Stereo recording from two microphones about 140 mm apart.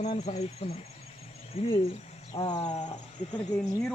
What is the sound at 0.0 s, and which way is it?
Speech, 50° left (ahead or behind).